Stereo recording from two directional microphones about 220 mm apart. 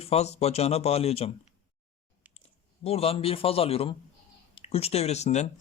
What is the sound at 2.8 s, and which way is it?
Speech, 25° left (ahead or behind).